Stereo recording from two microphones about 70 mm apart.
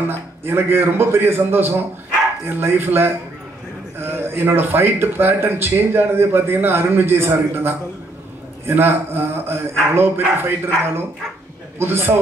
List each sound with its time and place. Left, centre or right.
0.0 s speech: right
11.8 s speech: right